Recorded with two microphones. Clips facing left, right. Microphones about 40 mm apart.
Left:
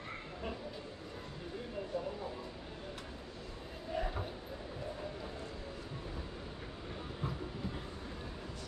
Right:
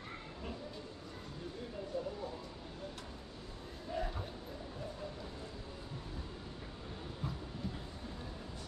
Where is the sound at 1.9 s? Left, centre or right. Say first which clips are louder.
Left 1 dB; centre.